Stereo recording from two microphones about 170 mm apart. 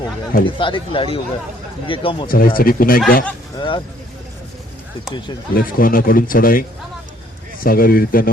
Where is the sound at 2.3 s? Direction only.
60° left (ahead or behind).